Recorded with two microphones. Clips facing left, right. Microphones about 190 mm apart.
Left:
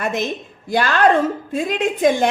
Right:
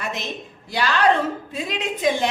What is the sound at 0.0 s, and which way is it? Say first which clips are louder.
A woman's voice: left 7 dB; 50° left (ahead or behind).